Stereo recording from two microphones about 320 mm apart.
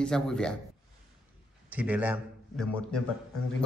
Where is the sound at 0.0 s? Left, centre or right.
Centre.